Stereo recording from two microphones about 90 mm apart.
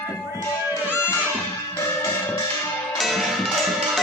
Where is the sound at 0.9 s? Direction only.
25° left (ahead or behind).